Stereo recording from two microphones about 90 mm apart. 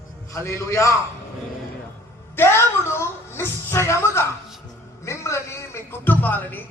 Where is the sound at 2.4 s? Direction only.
25° left (ahead or behind).